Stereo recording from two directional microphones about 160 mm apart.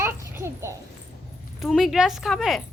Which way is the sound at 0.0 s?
15° right (ahead or behind).